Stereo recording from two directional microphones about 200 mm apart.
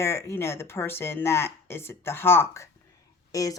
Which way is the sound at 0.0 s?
15° left (ahead or behind).